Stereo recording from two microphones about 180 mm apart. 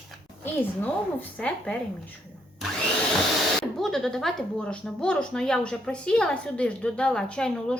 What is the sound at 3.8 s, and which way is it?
Speech, centre (ahead or behind).